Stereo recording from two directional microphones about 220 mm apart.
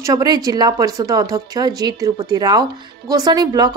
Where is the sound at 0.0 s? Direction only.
15° right (ahead or behind).